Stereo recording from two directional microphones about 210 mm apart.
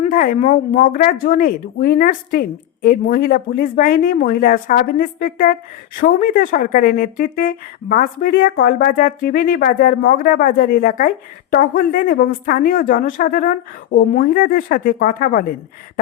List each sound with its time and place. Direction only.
0.0 s a woman's voice: 35° left (ahead or behind)